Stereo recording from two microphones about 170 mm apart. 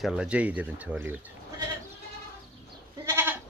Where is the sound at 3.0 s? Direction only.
15° right (ahead or behind).